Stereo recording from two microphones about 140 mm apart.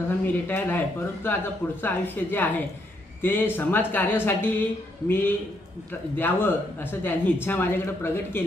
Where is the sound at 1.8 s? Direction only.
15° left (ahead or behind).